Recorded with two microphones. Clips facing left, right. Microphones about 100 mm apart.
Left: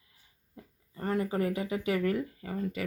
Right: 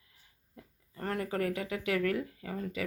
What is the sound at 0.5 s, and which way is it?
Speech, 5° left (ahead or behind).